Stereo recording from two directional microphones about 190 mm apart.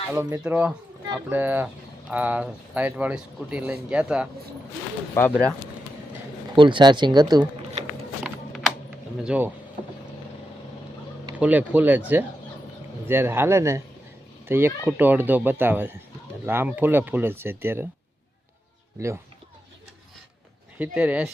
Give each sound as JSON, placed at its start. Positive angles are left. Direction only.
{"t": 0.1, "sound": "speech", "side_deg": -15}
{"t": 5.2, "sound": "speech", "side_deg": 15}
{"t": 6.6, "sound": "speech", "side_deg": -25}
{"t": 8.2, "sound": "a sound", "side_deg": 0}
{"t": 9.2, "sound": "speech", "side_deg": -5}
{"t": 11.3, "sound": "speech", "side_deg": -10}
{"t": 18.9, "sound": "speech", "side_deg": -15}
{"t": 20.7, "sound": "speech", "side_deg": -10}